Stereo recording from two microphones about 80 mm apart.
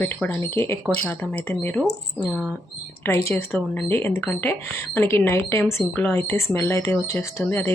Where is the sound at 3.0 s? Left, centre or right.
Left.